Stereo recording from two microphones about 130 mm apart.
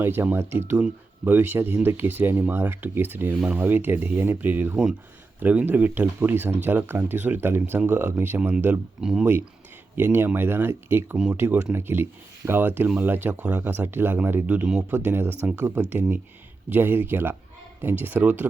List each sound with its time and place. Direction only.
0.0 s speech: 15° right (ahead or behind)
9.9 s speech: 15° right (ahead or behind)